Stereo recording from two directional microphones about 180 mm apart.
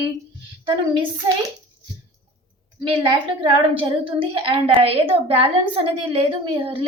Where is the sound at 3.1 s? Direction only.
30° right (ahead or behind).